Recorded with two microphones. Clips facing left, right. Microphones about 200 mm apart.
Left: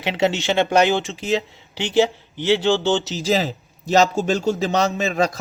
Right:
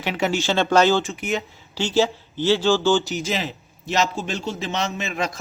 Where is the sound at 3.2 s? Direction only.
35° left (ahead or behind).